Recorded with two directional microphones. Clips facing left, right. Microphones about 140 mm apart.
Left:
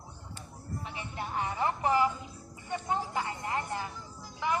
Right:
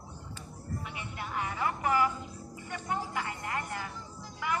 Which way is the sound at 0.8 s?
30° left (ahead or behind).